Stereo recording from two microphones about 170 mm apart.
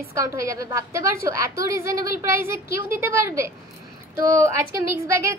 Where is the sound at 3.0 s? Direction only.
15° right (ahead or behind).